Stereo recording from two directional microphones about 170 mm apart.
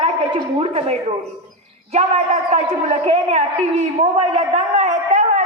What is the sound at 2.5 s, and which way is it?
A man's voice, 40° right (ahead or behind).